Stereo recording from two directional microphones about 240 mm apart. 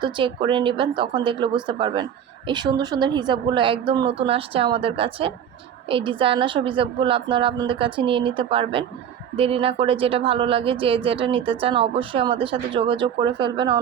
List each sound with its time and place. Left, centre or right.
0.0 s speech: right